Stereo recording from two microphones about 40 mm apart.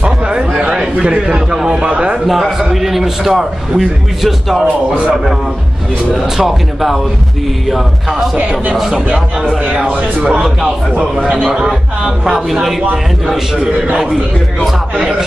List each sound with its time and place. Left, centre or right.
0.0 s a sound: right
1.7 s speech: right
2.2 s a man's voice: centre
6.3 s a man's voice: centre
8.7 s a man's voice: centre
11.3 s a man's voice: right
11.6 s speech: centre
15.0 s a man's voice: centre